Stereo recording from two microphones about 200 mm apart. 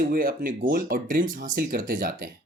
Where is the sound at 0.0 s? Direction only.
45° right (ahead or behind).